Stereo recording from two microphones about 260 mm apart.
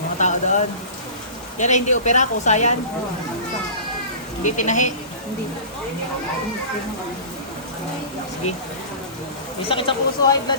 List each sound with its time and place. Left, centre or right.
0.2 s rain: left
1.5 s speech: left
4.4 s speech: left
9.6 s speech: centre